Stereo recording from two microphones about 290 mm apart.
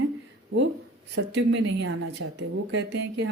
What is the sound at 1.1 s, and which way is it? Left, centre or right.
Speech, right.